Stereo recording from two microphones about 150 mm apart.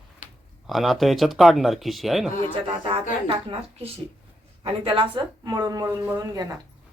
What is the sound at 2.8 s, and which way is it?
Speech, 40° right (ahead or behind).